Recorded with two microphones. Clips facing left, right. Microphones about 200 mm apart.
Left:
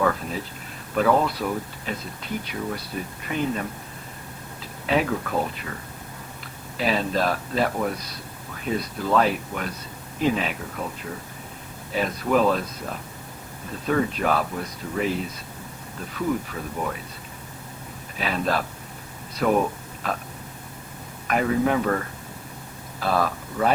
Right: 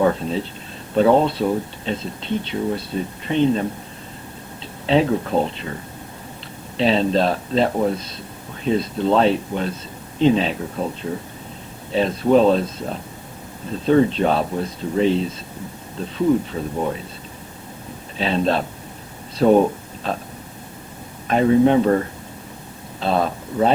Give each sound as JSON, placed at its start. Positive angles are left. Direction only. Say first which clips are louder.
{"t": 0.0, "sound": "speech", "louder": "right 6 dB", "side_deg": -25}
{"t": 6.7, "sound": "speech", "louder": "right 6 dB", "side_deg": -25}
{"t": 18.2, "sound": "speech", "louder": "right 5 dB", "side_deg": -25}
{"t": 21.2, "sound": "speech", "louder": "right 7 dB", "side_deg": -25}